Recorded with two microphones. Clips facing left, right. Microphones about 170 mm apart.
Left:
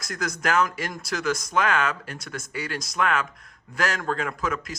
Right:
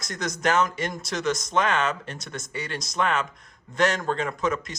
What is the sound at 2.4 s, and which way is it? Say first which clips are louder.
A man's voice: left 2 dB; 5° left (ahead or behind).